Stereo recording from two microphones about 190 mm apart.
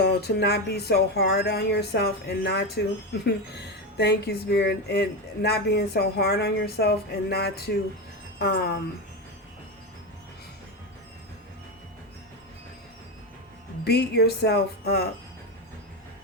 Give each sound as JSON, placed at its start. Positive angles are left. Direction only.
{"t": 0.0, "sound": "speech", "side_deg": 55}
{"t": 3.9, "sound": "speech", "side_deg": 60}
{"t": 13.8, "sound": "speech", "side_deg": 60}